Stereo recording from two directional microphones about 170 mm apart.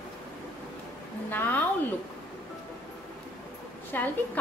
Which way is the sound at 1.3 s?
10° left (ahead or behind).